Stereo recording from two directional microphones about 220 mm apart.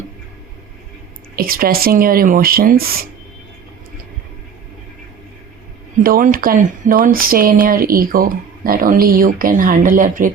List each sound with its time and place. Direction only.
1.4 s speech: 40° right (ahead or behind)
6.0 s speech: 40° right (ahead or behind)